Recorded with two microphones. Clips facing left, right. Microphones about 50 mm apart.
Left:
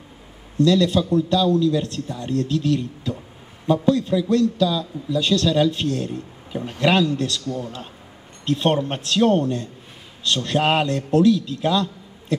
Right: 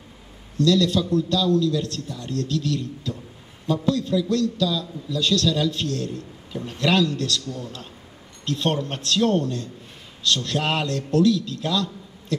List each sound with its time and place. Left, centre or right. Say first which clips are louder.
0.6 s a man's voice: left 2 dB; left